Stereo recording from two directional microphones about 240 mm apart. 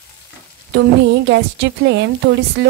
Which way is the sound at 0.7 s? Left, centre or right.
Right.